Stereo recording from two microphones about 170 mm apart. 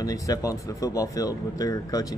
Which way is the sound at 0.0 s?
20° left (ahead or behind).